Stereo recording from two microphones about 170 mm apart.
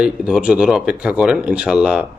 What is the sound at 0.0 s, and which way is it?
Speech, 5° right (ahead or behind).